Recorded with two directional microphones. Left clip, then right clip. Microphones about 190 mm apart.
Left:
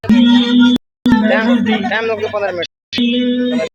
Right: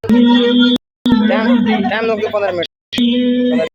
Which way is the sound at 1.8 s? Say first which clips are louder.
Right 1 dB; 5° right (ahead or behind).